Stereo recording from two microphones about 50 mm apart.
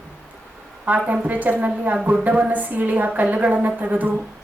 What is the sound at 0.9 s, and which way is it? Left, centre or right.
A woman's voice, right.